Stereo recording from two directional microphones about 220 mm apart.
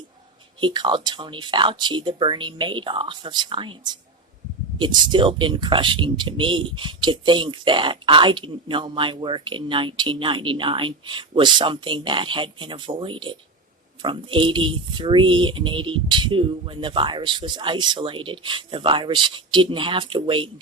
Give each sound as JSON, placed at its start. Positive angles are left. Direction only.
{"t": 0.6, "sound": "speech", "side_deg": -20}
{"t": 5.1, "sound": "speech", "side_deg": -20}